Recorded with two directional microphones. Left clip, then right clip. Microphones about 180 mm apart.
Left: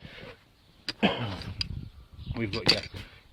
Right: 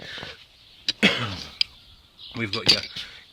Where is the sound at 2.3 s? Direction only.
5° right (ahead or behind).